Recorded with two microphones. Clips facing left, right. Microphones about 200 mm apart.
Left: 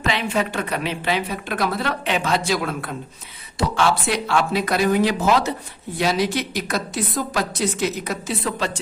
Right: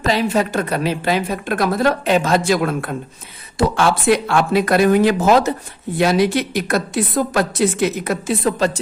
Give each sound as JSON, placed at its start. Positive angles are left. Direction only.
{"t": 0.0, "sound": "a woman's voice", "side_deg": -40}